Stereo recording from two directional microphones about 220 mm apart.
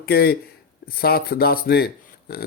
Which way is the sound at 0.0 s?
45° left (ahead or behind).